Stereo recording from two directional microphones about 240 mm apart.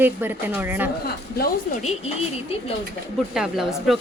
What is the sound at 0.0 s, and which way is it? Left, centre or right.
Speech, centre.